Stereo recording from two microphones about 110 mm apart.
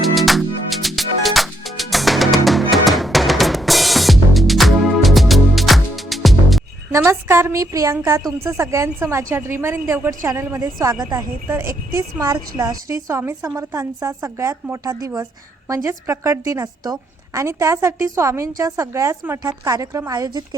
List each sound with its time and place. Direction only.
0.1 s music: centre (ahead or behind)
6.9 s a woman's voice: 25° right (ahead or behind)